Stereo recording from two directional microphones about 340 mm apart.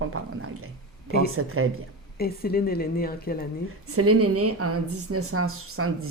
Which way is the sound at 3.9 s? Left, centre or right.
Right.